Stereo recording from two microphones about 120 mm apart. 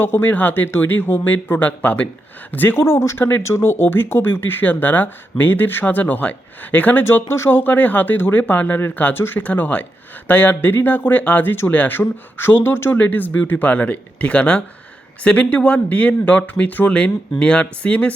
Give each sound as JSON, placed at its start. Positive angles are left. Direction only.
{"t": 0.0, "sound": "speech", "side_deg": 15}